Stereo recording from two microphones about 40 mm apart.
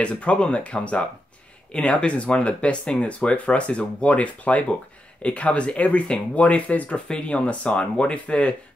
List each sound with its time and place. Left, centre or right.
0.2 s speech: left